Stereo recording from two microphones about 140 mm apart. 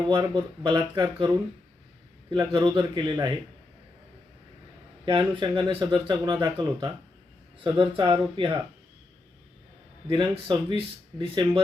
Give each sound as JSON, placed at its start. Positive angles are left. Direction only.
{"t": 0.1, "sound": "speech", "side_deg": -35}
{"t": 2.5, "sound": "speech", "side_deg": -35}
{"t": 5.0, "sound": "speech", "side_deg": -35}
{"t": 10.1, "sound": "speech", "side_deg": -35}